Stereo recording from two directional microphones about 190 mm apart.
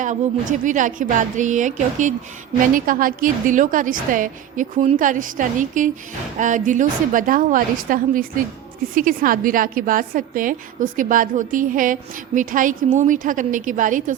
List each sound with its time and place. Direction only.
0.6 s a woman's voice: 45° right (ahead or behind)